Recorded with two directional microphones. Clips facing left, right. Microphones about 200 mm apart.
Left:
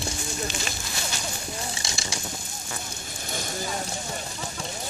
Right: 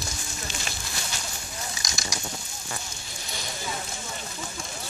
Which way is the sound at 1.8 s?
30° left (ahead or behind).